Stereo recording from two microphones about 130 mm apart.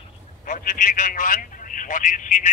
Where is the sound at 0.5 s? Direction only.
90° left.